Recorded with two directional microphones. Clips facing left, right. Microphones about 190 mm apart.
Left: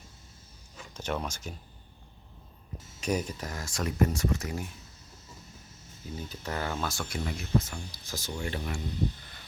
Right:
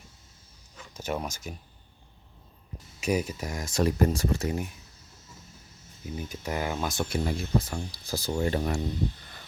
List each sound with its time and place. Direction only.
0.9 s speech: 10° right (ahead or behind)
3.0 s speech: 10° right (ahead or behind)
3.8 s speech: 35° right (ahead or behind)
6.1 s speech: 10° right (ahead or behind); by 8.8 s 40° right (ahead or behind)